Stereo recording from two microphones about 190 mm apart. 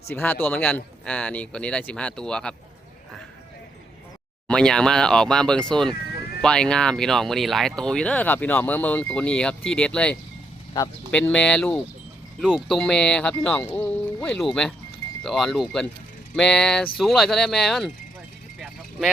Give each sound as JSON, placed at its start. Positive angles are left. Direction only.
{"t": 0.1, "sound": "speech", "side_deg": 10}
{"t": 4.4, "sound": "speech", "side_deg": 5}
{"t": 18.6, "sound": "vehicle", "side_deg": 0}